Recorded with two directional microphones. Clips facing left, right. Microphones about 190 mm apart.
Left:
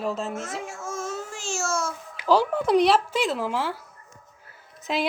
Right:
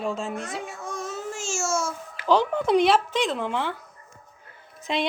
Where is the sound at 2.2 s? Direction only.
5° left (ahead or behind).